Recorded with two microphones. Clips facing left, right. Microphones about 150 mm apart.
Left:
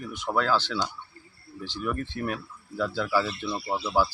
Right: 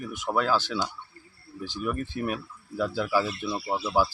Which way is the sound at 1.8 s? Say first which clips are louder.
Right 1 dB; 10° right (ahead or behind).